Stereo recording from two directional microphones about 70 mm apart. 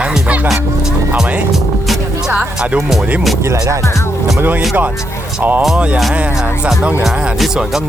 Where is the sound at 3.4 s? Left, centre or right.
Right.